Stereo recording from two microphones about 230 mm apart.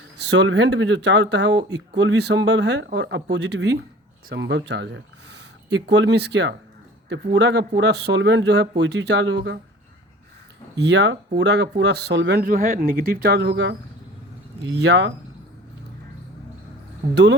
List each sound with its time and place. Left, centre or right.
0.2 s speech: right
10.8 s speech: right
14.8 s speech: right